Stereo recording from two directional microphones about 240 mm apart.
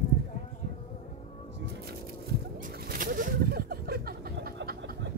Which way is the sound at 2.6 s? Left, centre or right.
Right.